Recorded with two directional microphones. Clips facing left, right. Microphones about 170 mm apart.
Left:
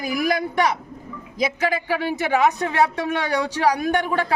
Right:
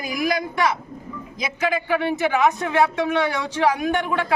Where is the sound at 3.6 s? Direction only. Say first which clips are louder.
Right 1 dB; 40° left (ahead or behind).